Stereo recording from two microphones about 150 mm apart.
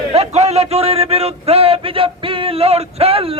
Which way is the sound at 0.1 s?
45° right (ahead or behind).